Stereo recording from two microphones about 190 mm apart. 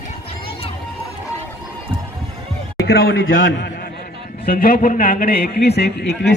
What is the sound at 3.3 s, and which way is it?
Speech, 70° left (ahead or behind).